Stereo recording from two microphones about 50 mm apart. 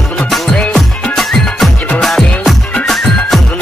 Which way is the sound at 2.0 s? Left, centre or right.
Centre.